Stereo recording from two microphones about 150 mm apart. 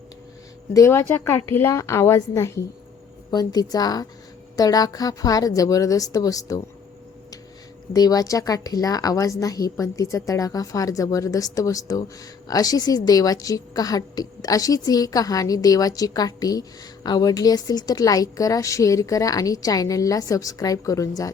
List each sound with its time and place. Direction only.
0.7 s speech: 20° left (ahead or behind)
7.9 s speech: 25° left (ahead or behind)